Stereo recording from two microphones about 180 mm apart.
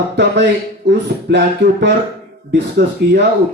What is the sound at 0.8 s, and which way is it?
Speech, 70° right (ahead or behind).